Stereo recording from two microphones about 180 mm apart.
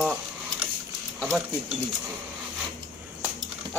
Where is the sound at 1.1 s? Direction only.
Centre (ahead or behind).